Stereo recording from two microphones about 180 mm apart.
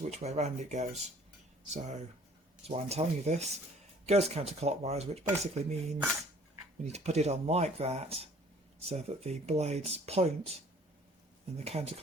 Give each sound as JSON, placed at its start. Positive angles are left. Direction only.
{"t": 0.0, "sound": "speech", "side_deg": -40}